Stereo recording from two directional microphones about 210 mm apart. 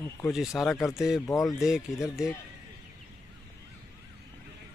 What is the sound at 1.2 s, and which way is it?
Speech, 15° left (ahead or behind).